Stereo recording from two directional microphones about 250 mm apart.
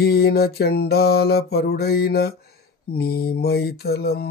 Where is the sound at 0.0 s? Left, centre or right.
Left.